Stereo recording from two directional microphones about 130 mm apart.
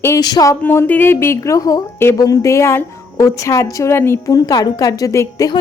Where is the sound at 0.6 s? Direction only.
15° left (ahead or behind).